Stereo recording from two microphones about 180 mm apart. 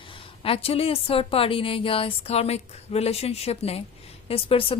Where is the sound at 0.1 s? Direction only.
30° left (ahead or behind).